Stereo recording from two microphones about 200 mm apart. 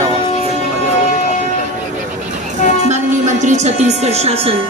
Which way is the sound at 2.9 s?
35° right (ahead or behind).